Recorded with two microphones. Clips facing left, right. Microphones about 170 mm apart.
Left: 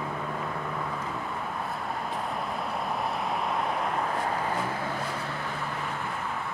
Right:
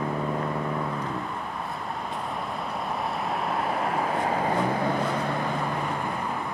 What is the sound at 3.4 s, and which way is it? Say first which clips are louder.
Vehicle: right 2 dB; centre (ahead or behind).